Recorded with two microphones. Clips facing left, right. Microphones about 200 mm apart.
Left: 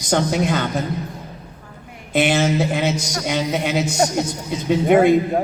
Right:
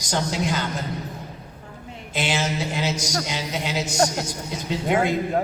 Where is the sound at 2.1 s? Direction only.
60° left (ahead or behind).